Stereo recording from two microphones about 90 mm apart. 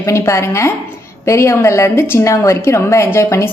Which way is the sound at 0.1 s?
35° left (ahead or behind).